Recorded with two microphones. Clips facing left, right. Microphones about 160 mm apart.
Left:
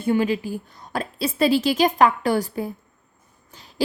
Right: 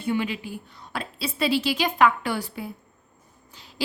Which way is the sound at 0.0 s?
45° left (ahead or behind).